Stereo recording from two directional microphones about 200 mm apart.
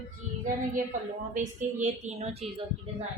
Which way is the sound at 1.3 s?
35° right (ahead or behind).